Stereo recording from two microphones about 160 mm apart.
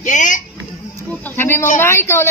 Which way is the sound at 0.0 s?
50° left (ahead or behind).